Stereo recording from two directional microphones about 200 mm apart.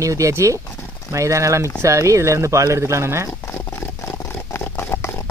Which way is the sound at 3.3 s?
10° left (ahead or behind).